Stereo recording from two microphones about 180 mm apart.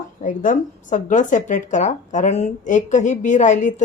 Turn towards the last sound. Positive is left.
turn(degrees=45)  # may be behind; listen again after turning